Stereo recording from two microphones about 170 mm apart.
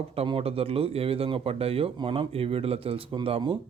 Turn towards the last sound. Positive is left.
turn(degrees=-30)  # may be behind; listen again after turning